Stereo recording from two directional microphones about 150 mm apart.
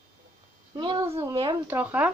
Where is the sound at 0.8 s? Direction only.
30° right (ahead or behind).